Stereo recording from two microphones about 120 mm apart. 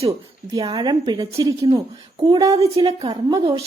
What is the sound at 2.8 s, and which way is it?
Speech, 40° right (ahead or behind).